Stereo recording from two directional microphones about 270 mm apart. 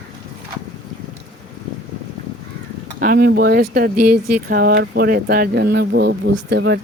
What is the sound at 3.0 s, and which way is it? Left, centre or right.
Speech, right.